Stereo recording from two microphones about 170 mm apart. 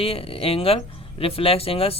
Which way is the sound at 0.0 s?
35° left (ahead or behind).